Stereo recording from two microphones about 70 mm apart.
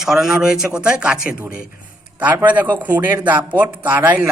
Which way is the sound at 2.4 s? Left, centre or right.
Right.